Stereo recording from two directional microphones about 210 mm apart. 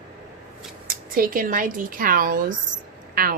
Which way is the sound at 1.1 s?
40° right (ahead or behind).